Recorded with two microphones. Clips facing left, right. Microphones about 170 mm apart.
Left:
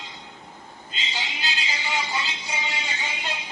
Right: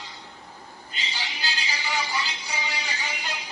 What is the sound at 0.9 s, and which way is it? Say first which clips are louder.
Music: left 2 dB; 20° left (ahead or behind).